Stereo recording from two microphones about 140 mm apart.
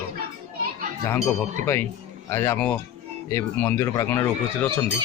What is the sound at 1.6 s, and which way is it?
Speech, 15° left (ahead or behind).